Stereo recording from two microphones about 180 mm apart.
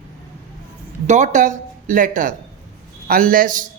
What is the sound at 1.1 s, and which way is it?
A woman's voice, 45° right (ahead or behind).